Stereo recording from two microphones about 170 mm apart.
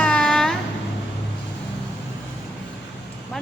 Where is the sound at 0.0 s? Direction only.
5° left (ahead or behind).